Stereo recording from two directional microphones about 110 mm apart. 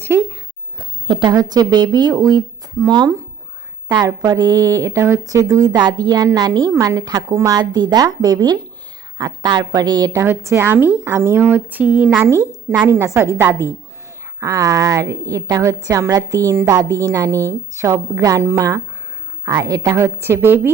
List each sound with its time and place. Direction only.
0.0 s a sound: 20° right (ahead or behind)
0.8 s a woman's voice: 45° right (ahead or behind)
10.1 s a woman's voice: 20° right (ahead or behind)